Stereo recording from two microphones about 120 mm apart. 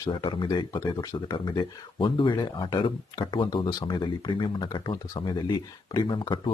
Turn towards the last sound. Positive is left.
turn(degrees=40)  # may be behind; listen again after turning